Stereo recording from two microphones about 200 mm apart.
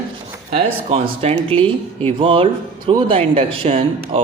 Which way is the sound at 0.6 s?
30° right (ahead or behind).